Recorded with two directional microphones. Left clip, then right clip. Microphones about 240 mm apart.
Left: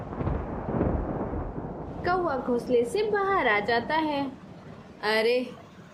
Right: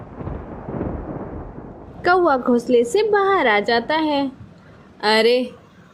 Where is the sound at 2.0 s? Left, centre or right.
Right.